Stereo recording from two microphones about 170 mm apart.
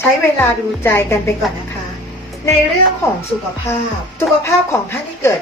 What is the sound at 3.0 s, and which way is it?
A woman's voice, 15° left (ahead or behind).